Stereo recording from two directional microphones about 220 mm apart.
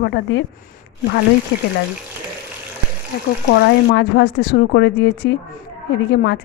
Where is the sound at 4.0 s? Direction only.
50° left (ahead or behind).